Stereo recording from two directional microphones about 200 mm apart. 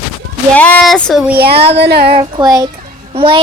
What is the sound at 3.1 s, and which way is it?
Speech, 25° right (ahead or behind).